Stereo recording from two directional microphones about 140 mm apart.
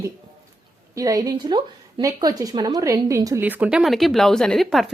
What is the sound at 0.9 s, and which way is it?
Speech, 25° right (ahead or behind).